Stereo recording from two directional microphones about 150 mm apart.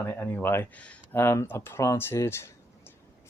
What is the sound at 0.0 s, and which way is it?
Speech, 10° left (ahead or behind).